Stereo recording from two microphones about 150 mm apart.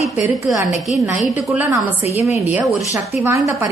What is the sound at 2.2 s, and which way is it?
A woman's voice, 10° right (ahead or behind).